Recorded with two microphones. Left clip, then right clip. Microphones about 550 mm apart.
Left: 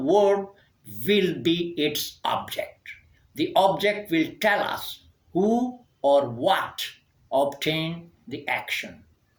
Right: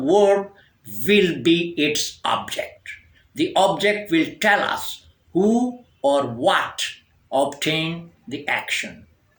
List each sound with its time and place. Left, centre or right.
0.0 s speech: left